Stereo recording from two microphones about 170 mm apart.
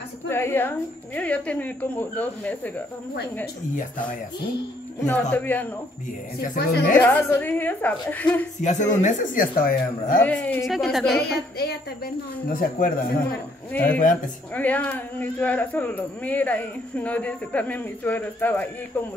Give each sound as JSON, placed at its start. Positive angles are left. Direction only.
{"t": 0.3, "sound": "speech", "side_deg": 15}
{"t": 5.3, "sound": "speech", "side_deg": 10}
{"t": 6.5, "sound": "speech", "side_deg": 50}
{"t": 7.0, "sound": "speech", "side_deg": 15}
{"t": 8.6, "sound": "speech", "side_deg": 45}
{"t": 10.1, "sound": "a woman's voice", "side_deg": 10}
{"t": 11.1, "sound": "speech", "side_deg": 65}
{"t": 12.5, "sound": "speech", "side_deg": 55}
{"t": 13.7, "sound": "speech", "side_deg": 10}